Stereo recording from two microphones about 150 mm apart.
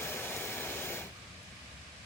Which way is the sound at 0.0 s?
15° left (ahead or behind).